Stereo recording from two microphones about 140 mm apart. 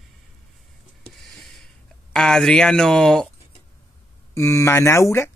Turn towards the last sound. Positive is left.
turn(degrees=20)  # may be behind; listen again after turning